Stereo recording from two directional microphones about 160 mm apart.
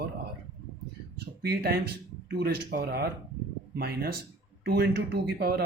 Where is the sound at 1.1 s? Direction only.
90° right.